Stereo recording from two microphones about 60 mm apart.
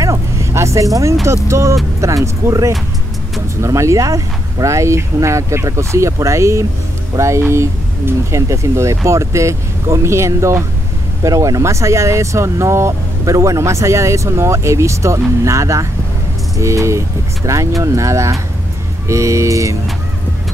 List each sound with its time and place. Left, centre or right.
0.0 s vehicle: right
1.2 s speech: right
11.2 s speech: right
17.4 s speech: right